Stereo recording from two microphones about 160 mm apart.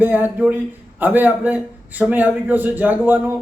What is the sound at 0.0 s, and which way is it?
A man's voice, 10° right (ahead or behind).